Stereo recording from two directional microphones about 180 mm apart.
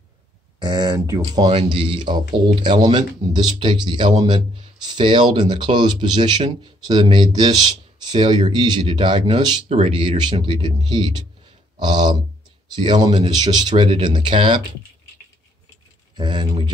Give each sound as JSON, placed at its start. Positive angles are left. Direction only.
{"t": 0.6, "sound": "speech", "side_deg": -25}
{"t": 16.2, "sound": "speech", "side_deg": -25}